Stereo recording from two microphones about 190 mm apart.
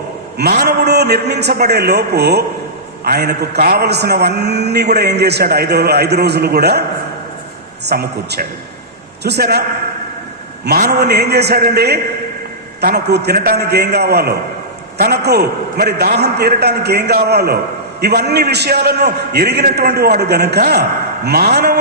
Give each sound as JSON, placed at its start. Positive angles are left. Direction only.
{"t": 0.3, "sound": "a man's voice", "side_deg": -55}
{"t": 7.9, "sound": "a man's voice", "side_deg": -55}
{"t": 10.7, "sound": "a man's voice", "side_deg": -55}